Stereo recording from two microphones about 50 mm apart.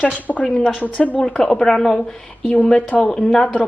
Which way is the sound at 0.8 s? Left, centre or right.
Left.